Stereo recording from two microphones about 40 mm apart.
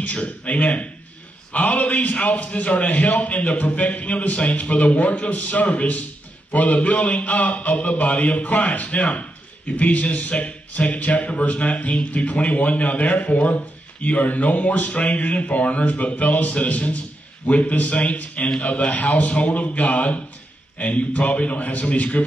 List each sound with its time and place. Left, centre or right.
0.0 s a man's voice: left
8.4 s a man's voice: left
8.7 s a man's voice: left